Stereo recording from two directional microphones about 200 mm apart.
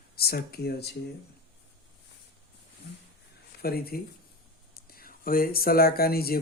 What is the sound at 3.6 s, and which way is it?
Speech, 50° left (ahead or behind).